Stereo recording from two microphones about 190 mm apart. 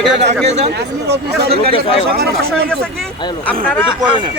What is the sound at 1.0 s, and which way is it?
Speech, 60° right (ahead or behind).